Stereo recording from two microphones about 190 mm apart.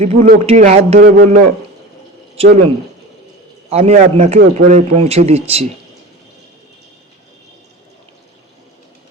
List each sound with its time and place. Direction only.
0.0 s speech: 40° right (ahead or behind)
3.7 s speech: 35° right (ahead or behind)